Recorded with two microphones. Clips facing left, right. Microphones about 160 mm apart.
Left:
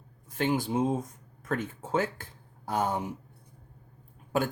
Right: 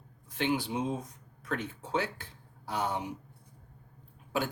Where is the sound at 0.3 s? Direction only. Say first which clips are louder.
Left 3 dB; 45° left (ahead or behind).